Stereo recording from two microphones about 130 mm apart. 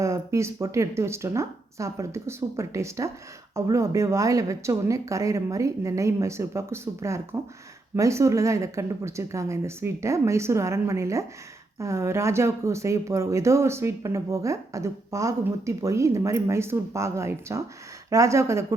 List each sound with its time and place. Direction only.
0.0 s speech: 25° right (ahead or behind)